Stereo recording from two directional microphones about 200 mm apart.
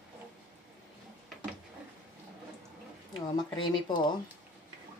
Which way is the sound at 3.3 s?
20° left (ahead or behind).